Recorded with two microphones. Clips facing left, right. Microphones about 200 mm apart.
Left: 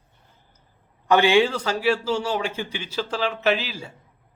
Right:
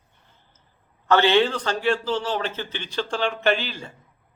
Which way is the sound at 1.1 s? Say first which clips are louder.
Left 1 dB; 10° left (ahead or behind).